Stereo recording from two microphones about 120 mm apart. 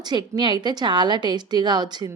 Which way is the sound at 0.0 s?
35° right (ahead or behind).